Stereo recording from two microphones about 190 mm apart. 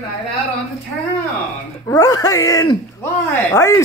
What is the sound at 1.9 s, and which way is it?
Speech, 15° left (ahead or behind).